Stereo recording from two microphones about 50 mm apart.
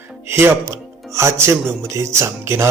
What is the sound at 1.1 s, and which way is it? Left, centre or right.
Music, right.